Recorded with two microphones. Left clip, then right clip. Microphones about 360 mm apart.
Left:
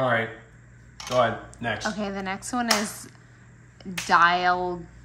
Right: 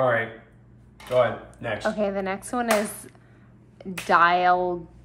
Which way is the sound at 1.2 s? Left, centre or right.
Centre.